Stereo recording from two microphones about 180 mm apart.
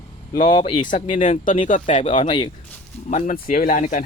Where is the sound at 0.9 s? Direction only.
45° left (ahead or behind).